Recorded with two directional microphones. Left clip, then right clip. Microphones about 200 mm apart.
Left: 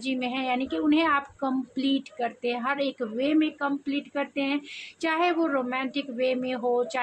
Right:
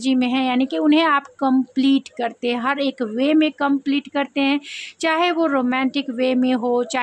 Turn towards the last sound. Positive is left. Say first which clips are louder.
# right 6 dB
turn(degrees=-50)  # may be behind; listen again after turning